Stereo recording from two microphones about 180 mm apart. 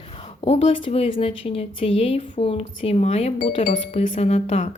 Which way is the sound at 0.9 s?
35° left (ahead or behind).